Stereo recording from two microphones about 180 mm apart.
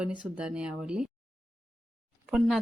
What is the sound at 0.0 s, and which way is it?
Speech, 5° right (ahead or behind).